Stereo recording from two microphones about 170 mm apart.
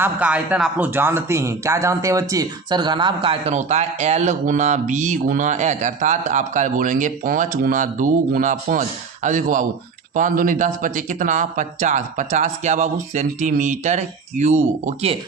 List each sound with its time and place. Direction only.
0.0 s speech: 10° right (ahead or behind); by 15.2 s 40° right (ahead or behind)